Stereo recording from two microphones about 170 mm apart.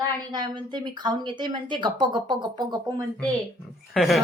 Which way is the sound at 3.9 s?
Centre (ahead or behind).